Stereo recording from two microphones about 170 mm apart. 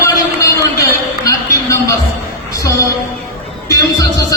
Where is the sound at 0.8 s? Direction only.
20° left (ahead or behind).